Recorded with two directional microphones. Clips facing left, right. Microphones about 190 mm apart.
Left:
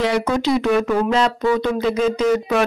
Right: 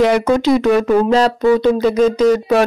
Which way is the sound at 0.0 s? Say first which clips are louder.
Right 6 dB; 50° right (ahead or behind).